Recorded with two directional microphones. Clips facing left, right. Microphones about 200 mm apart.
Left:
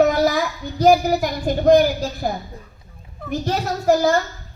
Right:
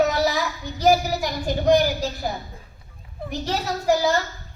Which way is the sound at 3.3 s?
50° left (ahead or behind).